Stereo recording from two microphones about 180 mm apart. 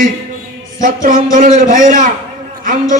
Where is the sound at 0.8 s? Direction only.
50° right (ahead or behind).